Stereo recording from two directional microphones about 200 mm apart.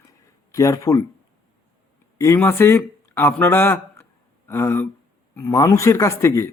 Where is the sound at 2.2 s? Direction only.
15° left (ahead or behind).